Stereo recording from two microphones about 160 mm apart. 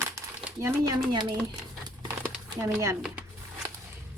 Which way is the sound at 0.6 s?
25° right (ahead or behind).